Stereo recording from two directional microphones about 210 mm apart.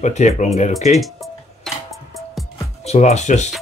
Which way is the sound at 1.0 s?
Centre (ahead or behind).